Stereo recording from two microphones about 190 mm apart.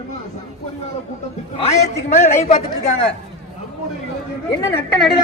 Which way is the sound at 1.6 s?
35° left (ahead or behind).